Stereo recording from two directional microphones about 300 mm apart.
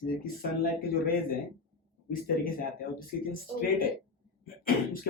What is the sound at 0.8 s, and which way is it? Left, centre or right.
Speech, left.